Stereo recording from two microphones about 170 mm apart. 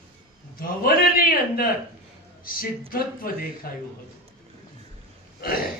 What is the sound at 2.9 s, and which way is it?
Speech, 60° left (ahead or behind).